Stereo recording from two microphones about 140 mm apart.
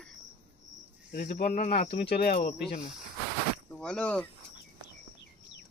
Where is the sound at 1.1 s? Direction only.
90° left.